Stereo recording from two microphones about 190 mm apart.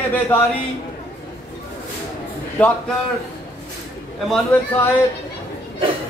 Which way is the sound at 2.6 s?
5° left (ahead or behind).